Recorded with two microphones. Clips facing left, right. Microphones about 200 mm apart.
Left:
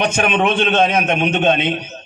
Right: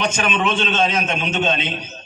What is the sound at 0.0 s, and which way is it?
A man's voice, 55° left (ahead or behind).